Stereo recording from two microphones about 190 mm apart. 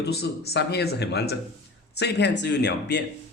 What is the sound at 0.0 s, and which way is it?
Speech, 55° left (ahead or behind).